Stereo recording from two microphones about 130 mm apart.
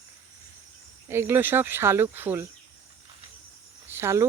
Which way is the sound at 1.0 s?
15° right (ahead or behind).